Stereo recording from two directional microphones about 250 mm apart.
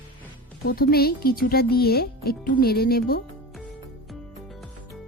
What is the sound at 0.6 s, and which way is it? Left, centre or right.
Speech, left.